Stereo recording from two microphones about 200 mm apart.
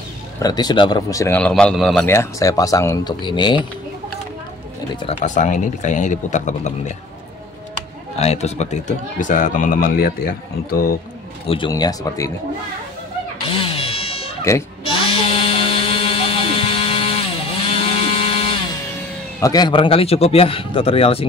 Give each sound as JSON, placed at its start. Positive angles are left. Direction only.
{"t": 0.4, "sound": "speech", "side_deg": 20}
{"t": 2.0, "sound": "speech", "side_deg": 15}
{"t": 5.0, "sound": "speech", "side_deg": 35}
{"t": 8.2, "sound": "speech", "side_deg": 35}
{"t": 11.4, "sound": "a man's voice", "side_deg": 25}
{"t": 13.5, "sound": "cat", "side_deg": 25}
{"t": 14.4, "sound": "bleat", "side_deg": 15}
{"t": 15.1, "sound": "a sound", "side_deg": 30}
{"t": 19.4, "sound": "a man's voice", "side_deg": 20}